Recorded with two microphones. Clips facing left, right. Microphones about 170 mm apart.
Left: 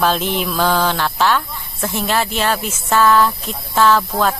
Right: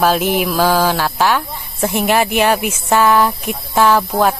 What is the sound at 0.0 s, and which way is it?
A woman's voice, 10° right (ahead or behind).